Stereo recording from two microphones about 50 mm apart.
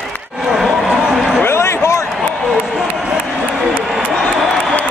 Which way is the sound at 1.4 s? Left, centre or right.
Left.